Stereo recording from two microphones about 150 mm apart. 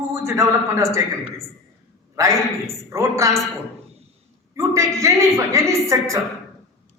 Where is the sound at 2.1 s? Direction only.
20° right (ahead or behind).